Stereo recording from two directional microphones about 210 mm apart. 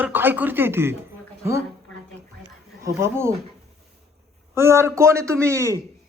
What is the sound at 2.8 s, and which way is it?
Speech, 15° right (ahead or behind).